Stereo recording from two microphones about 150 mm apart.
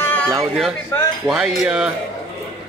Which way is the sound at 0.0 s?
10° left (ahead or behind).